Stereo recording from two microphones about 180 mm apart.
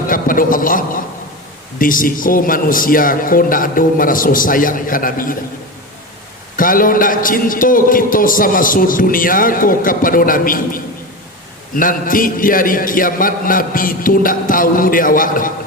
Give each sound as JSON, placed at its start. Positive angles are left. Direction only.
{"t": 0.1, "sound": "a sound", "side_deg": 50}
{"t": 1.8, "sound": "a man's voice", "side_deg": 50}
{"t": 6.6, "sound": "a man's voice", "side_deg": 50}
{"t": 11.7, "sound": "a man's voice", "side_deg": 50}